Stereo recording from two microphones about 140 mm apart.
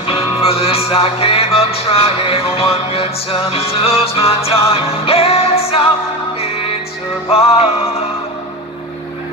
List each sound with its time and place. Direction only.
0.0 s music: 45° left (ahead or behind)
7.2 s music: 45° left (ahead or behind)